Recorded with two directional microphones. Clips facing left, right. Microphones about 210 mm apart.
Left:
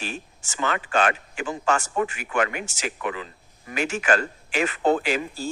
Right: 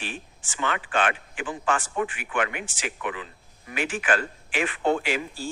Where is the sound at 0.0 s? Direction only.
40° left (ahead or behind).